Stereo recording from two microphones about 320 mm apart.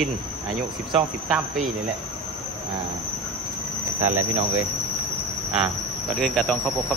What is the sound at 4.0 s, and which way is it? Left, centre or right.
Speech, right.